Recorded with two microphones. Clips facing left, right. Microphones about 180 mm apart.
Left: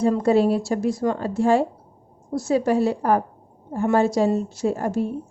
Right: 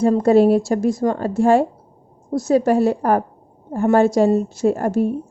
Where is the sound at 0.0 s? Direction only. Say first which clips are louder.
Right 5 dB; 45° right (ahead or behind).